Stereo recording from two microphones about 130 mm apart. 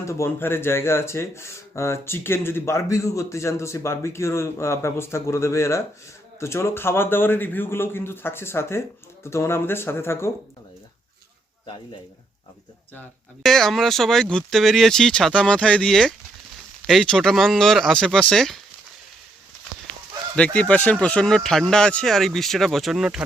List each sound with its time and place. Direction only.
0.0 s speech: 20° left (ahead or behind)
13.4 s speech: centre (ahead or behind)
20.3 s speech: 10° left (ahead or behind)